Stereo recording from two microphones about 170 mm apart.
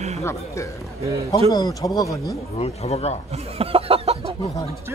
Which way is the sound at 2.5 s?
35° left (ahead or behind).